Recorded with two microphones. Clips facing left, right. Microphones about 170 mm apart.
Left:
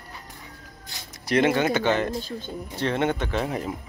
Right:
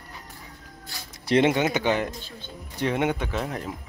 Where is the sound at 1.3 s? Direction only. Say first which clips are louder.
Even; 25° right (ahead or behind); by 3.7 s centre (ahead or behind).